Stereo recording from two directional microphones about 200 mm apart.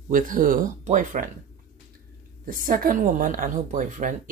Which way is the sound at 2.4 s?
45° right (ahead or behind).